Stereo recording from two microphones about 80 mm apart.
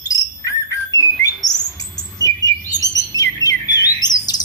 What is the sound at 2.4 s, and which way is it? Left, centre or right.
Chirp, left.